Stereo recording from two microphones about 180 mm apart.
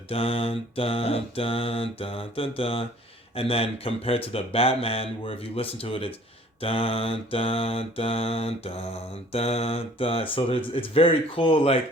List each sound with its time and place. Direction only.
0.1 s mantra: 30° left (ahead or behind)